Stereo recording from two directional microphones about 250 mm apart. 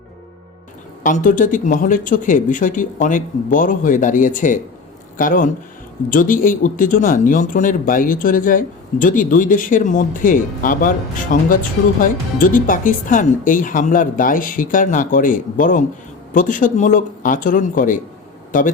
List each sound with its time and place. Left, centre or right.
1.0 s speech: left